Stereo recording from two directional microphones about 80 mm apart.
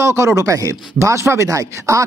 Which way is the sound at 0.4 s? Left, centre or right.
Right.